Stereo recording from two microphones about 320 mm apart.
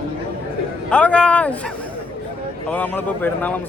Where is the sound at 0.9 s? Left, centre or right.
Centre.